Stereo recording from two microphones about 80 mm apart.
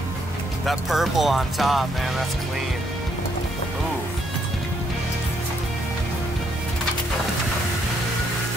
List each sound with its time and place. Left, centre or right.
0.7 s speech: centre